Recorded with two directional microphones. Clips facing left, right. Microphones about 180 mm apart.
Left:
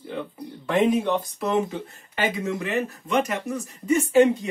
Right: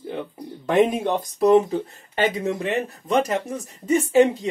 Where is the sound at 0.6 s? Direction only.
40° right (ahead or behind).